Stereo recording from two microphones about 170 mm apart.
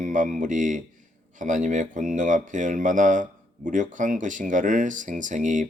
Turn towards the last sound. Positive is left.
turn(degrees=-50)  # may be behind; listen again after turning